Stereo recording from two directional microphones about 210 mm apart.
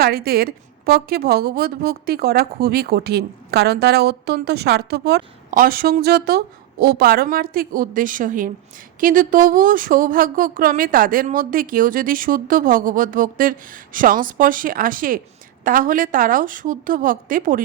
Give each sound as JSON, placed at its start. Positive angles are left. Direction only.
{"t": 0.0, "sound": "a woman's voice", "side_deg": -45}